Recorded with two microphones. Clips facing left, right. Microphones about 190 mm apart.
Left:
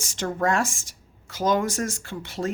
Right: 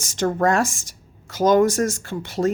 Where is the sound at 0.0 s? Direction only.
40° right (ahead or behind).